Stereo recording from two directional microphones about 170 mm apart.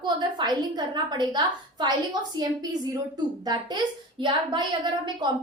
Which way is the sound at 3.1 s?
25° right (ahead or behind).